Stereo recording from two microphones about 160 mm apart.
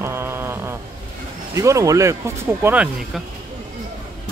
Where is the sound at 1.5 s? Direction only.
20° right (ahead or behind).